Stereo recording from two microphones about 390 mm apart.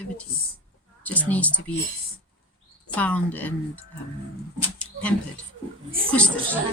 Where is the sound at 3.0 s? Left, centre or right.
Centre.